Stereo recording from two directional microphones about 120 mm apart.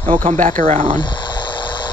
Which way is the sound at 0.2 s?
75° right (ahead or behind).